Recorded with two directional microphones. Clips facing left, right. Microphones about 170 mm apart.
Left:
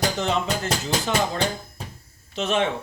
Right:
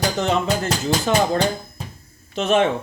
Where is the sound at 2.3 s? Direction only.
50° right (ahead or behind).